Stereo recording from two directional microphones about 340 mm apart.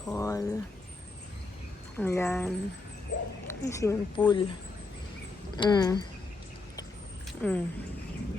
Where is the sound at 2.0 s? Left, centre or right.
Centre.